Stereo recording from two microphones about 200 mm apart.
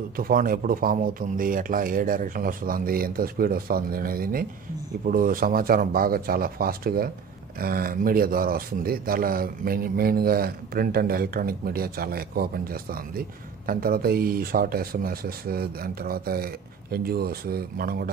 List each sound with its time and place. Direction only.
0.1 s speech: 45° right (ahead or behind)